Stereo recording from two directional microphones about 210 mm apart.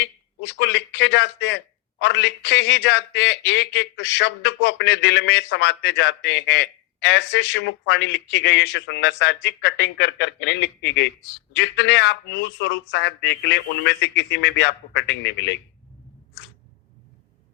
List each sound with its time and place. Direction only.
0.0 s a man's voice: 55° left (ahead or behind)